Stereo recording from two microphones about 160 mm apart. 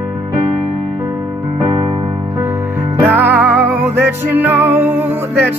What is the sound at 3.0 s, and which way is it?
Music, 15° right (ahead or behind).